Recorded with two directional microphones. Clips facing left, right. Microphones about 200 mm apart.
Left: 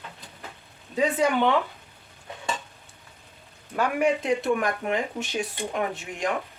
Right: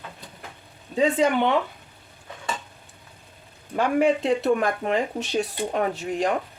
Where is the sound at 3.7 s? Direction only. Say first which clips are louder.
Right 3 dB; 30° right (ahead or behind).